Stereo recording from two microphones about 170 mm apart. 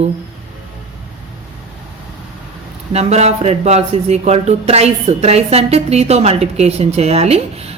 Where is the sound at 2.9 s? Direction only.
40° right (ahead or behind).